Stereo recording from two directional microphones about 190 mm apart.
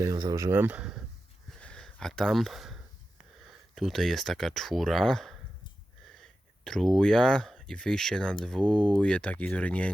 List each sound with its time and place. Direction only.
0.0 s speech: 20° right (ahead or behind)
1.5 s a sound: 5° left (ahead or behind)
3.4 s speech: centre (ahead or behind)